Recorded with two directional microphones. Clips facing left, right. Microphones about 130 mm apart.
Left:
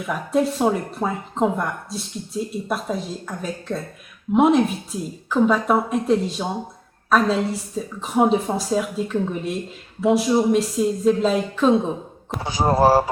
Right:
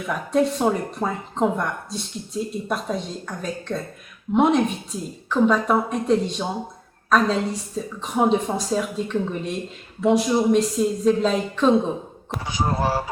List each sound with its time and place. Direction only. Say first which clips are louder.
0.0 s a woman's voice: even; 5° left (ahead or behind)
12.5 s speech: left 7 dB; 40° left (ahead or behind)